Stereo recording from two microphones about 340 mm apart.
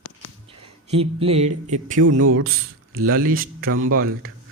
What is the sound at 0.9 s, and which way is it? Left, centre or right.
Speech, centre.